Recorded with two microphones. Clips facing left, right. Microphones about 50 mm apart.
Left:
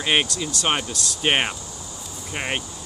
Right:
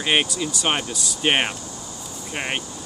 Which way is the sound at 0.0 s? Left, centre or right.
Centre.